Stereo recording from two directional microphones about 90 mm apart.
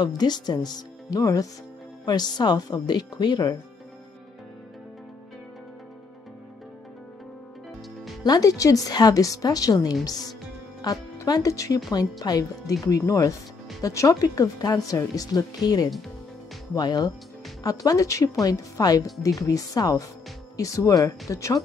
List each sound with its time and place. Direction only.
0.0 s speech: 50° left (ahead or behind)
8.2 s speech: 45° left (ahead or behind)